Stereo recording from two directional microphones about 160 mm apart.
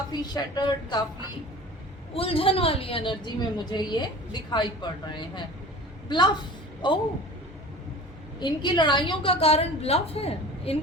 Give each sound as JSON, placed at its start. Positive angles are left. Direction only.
{"t": 0.1, "sound": "speech", "side_deg": 25}
{"t": 2.1, "sound": "a woman's voice", "side_deg": 35}
{"t": 8.4, "sound": "a woman's voice", "side_deg": 25}